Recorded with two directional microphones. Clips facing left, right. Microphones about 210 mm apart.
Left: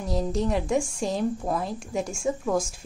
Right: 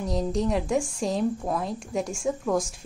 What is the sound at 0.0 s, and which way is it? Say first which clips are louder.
A woman's voice: even; centre (ahead or behind).